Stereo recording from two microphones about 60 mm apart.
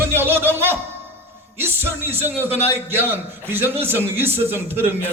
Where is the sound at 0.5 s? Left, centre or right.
Right.